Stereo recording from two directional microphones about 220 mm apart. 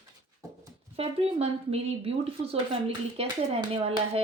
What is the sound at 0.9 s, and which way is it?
Speech, 25° right (ahead or behind).